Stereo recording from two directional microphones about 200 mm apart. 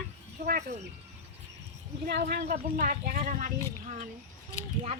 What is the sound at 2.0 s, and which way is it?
Speech, 50° right (ahead or behind).